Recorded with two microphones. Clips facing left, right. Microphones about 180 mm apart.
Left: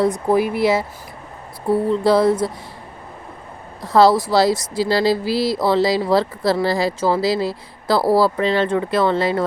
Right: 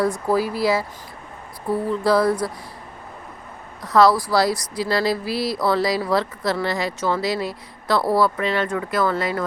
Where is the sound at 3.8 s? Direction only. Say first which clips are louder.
Left 3 dB; 25° left (ahead or behind).